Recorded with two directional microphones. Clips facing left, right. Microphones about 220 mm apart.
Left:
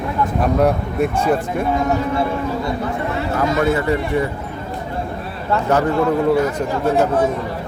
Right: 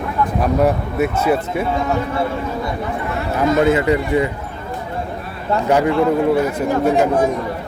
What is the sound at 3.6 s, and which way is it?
Speech, 20° right (ahead or behind).